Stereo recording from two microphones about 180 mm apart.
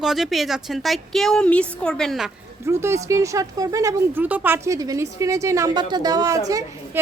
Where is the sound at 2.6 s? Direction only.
15° right (ahead or behind).